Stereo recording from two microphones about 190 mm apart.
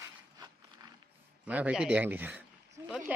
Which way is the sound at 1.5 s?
5° right (ahead or behind).